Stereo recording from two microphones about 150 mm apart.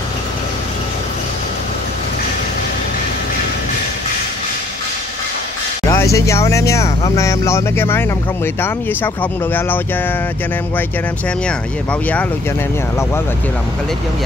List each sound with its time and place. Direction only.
5.9 s speech: 20° left (ahead or behind)
11.4 s speech: 10° left (ahead or behind)